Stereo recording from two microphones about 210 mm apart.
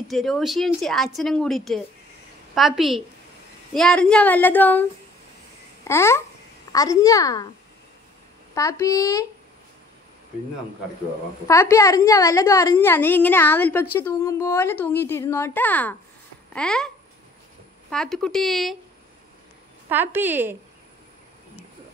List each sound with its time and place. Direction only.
0.1 s a woman's voice: centre (ahead or behind)
5.9 s a woman's voice: 10° left (ahead or behind)
8.5 s a woman's voice: 15° left (ahead or behind)
11.4 s a woman's voice: 15° left (ahead or behind)
19.9 s a woman's voice: 10° right (ahead or behind)